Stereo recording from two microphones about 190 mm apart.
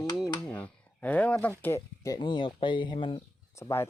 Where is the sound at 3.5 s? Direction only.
15° left (ahead or behind).